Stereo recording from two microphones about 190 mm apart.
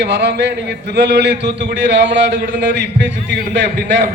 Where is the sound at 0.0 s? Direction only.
65° right (ahead or behind).